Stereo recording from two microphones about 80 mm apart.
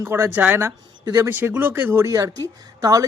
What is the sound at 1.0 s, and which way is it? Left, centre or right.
Speech, right.